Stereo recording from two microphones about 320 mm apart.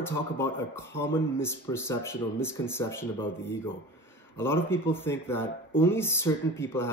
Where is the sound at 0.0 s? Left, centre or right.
Centre.